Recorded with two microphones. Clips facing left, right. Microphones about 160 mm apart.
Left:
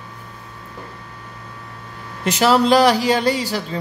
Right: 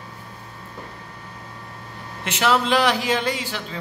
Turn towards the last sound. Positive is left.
turn(degrees=40)  # may be behind; listen again after turning